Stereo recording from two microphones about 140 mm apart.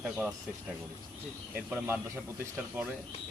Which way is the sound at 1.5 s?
15° right (ahead or behind).